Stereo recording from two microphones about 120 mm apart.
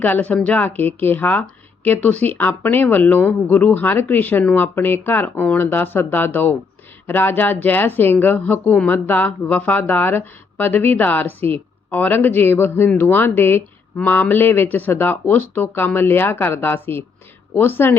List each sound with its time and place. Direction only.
0.0 s speech: 15° left (ahead or behind)